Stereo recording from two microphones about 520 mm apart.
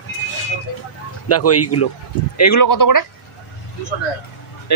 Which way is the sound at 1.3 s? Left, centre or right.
Left.